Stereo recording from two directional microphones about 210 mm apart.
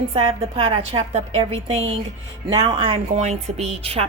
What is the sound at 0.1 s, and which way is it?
A woman's voice, 25° right (ahead or behind).